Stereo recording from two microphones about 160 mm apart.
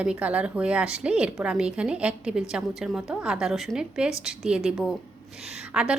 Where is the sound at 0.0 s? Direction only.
5° right (ahead or behind).